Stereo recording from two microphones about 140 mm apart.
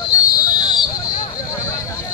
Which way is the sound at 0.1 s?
25° left (ahead or behind).